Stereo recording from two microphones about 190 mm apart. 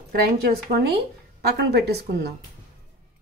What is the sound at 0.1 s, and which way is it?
A woman's voice, 55° right (ahead or behind).